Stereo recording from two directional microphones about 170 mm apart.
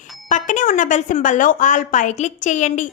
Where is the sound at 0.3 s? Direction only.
45° left (ahead or behind).